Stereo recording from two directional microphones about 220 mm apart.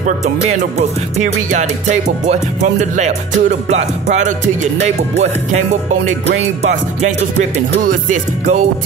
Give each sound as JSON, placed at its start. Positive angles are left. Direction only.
{"t": 0.0, "sound": "music", "side_deg": -35}
{"t": 6.6, "sound": "music", "side_deg": -30}